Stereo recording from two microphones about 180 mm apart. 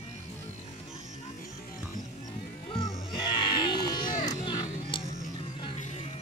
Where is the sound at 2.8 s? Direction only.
25° left (ahead or behind).